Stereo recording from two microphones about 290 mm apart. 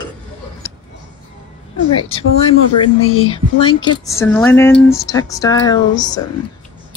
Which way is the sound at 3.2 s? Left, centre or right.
Centre.